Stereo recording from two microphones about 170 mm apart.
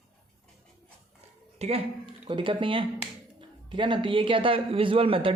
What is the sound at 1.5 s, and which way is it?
Speech, 40° right (ahead or behind).